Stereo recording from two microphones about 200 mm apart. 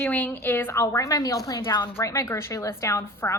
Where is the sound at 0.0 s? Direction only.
10° left (ahead or behind).